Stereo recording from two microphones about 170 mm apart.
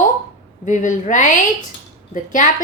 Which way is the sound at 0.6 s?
50° left (ahead or behind).